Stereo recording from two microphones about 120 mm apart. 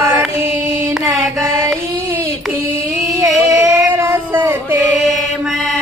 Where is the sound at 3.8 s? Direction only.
20° right (ahead or behind).